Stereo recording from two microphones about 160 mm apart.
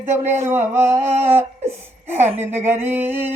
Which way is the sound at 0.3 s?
15° right (ahead or behind).